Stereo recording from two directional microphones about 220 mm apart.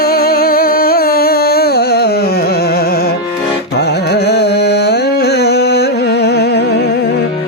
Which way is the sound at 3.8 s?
50° left (ahead or behind).